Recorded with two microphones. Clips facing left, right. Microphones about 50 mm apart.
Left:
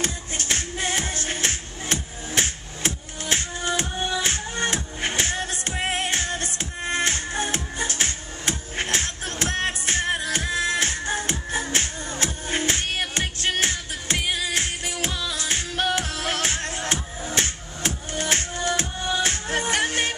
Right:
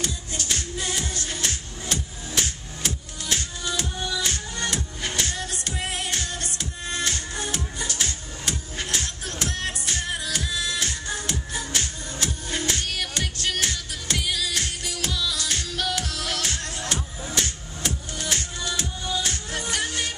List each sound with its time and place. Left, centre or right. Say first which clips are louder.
0.0 s music: left 2 dB; left